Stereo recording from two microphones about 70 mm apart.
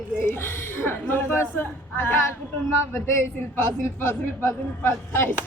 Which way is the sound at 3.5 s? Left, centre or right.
Left.